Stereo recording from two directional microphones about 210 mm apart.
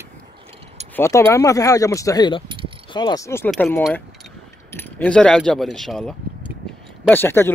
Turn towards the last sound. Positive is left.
turn(degrees=10)  # may be behind; listen again after turning